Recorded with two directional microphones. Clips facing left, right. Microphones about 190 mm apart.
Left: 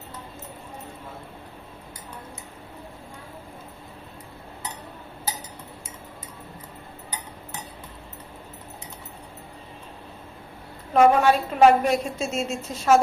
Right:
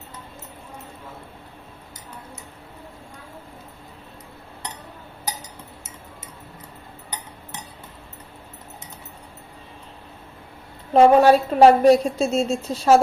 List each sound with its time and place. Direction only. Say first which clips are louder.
10.9 s a woman's voice: right 4 dB; 35° right (ahead or behind)